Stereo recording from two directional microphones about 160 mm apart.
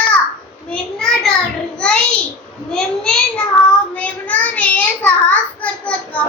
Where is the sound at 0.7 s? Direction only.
5° left (ahead or behind).